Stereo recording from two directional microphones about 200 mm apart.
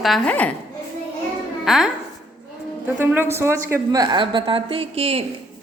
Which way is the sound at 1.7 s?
Centre (ahead or behind).